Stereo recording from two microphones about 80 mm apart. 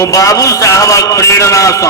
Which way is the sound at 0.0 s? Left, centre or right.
Left.